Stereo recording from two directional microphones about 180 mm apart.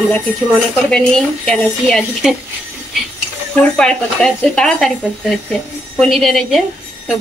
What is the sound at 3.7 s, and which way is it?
Speech, 5° left (ahead or behind).